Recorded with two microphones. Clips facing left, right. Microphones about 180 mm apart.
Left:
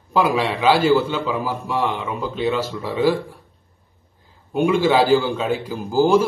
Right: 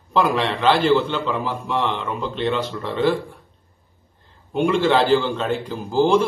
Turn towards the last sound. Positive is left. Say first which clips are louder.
# left 1 dB
turn(degrees=5)  # may be behind; listen again after turning